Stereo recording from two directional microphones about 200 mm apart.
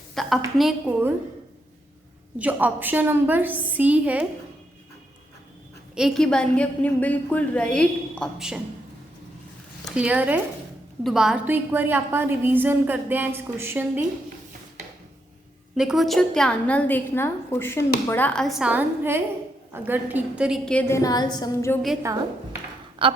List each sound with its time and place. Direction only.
0.1 s a woman's voice: centre (ahead or behind)
2.4 s a woman's voice: 10° right (ahead or behind)
5.9 s a woman's voice: centre (ahead or behind)
9.9 s a woman's voice: 5° right (ahead or behind)
15.7 s a woman's voice: centre (ahead or behind); by 21.8 s 15° left (ahead or behind)
23.0 s a woman's voice: 25° right (ahead or behind)